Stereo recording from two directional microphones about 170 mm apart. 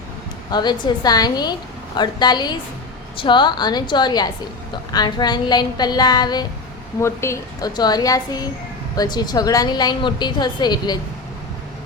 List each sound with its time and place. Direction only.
0.5 s a woman's voice: 25° left (ahead or behind)